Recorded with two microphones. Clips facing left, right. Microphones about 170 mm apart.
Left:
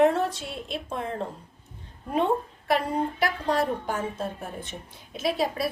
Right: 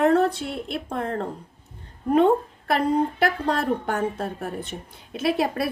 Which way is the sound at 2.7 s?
60° right (ahead or behind).